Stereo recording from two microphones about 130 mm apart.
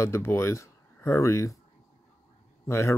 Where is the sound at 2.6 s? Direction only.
20° left (ahead or behind).